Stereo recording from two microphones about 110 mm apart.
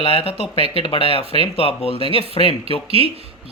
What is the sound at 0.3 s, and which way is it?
Speech, 65° right (ahead or behind).